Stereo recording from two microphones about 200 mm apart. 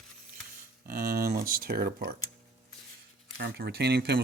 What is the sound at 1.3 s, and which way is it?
Speech, 45° right (ahead or behind).